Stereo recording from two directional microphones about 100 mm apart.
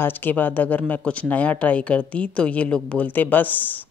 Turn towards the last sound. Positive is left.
turn(degrees=15)  # may be behind; listen again after turning